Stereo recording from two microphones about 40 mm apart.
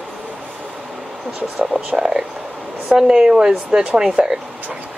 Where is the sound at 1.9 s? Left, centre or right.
Centre.